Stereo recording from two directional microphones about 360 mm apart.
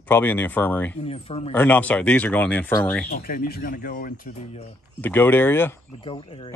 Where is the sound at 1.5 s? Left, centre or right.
Centre.